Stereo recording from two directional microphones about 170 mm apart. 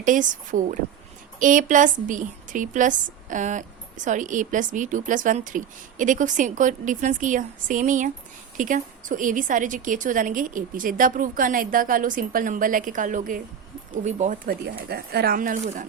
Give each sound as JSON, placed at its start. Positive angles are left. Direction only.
{"t": 0.0, "sound": "a woman's voice", "side_deg": -50}
{"t": 14.8, "sound": "a woman's voice", "side_deg": -65}